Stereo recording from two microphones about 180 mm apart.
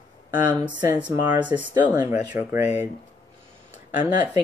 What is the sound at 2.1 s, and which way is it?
Speech, 10° right (ahead or behind).